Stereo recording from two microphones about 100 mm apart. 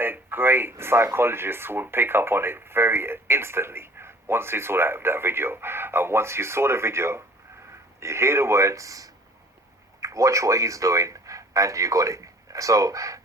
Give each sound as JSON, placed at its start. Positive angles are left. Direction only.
{"t": 0.0, "sound": "speech", "side_deg": -20}